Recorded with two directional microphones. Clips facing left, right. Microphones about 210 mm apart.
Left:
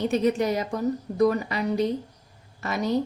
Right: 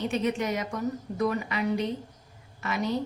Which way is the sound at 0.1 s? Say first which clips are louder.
Left 5 dB; 35° left (ahead or behind).